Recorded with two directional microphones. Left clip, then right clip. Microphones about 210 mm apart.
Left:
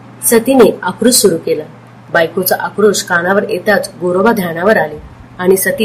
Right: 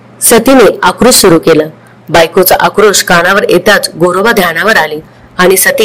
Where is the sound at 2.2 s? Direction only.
50° right (ahead or behind).